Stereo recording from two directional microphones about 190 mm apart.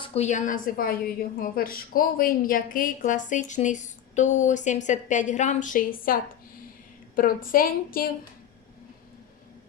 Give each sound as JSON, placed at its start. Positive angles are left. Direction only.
{"t": 0.0, "sound": "a woman's voice", "side_deg": 35}
{"t": 7.2, "sound": "a woman's voice", "side_deg": 50}